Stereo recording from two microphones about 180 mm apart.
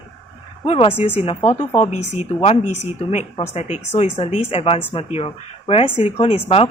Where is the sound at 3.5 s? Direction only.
35° left (ahead or behind).